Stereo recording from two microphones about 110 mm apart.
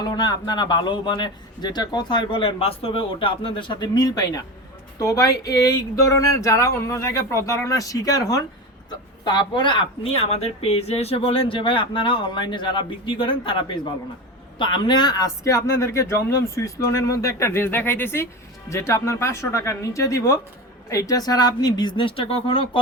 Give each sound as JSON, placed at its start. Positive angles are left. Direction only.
{"t": 0.0, "sound": "speech", "side_deg": 40}